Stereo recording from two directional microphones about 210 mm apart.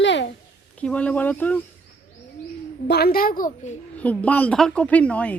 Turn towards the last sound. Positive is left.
turn(degrees=5)  # may be behind; listen again after turning